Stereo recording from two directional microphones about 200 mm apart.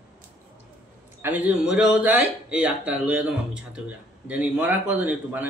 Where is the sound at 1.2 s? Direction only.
10° right (ahead or behind).